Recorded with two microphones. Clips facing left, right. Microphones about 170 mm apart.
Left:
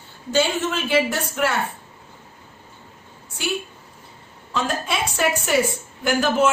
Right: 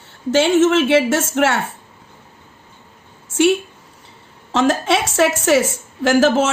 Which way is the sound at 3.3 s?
75° right (ahead or behind).